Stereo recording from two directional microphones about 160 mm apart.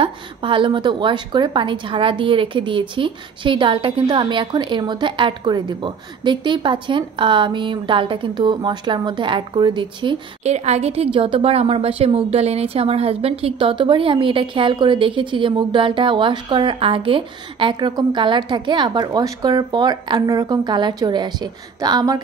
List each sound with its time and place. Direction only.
0.0 s a woman's voice: 30° right (ahead or behind)
10.4 s a woman's voice: 45° right (ahead or behind); by 22.2 s 25° right (ahead or behind)